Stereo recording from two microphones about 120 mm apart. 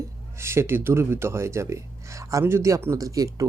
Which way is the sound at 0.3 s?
20° right (ahead or behind).